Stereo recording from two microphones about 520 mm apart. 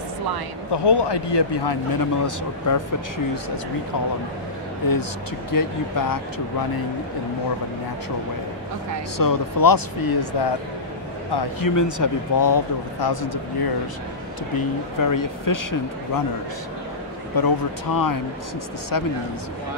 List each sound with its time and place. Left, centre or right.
0.8 s speech: left
5.5 s speech: left
9.2 s speech: left
15.0 s speech: left
17.4 s speech: left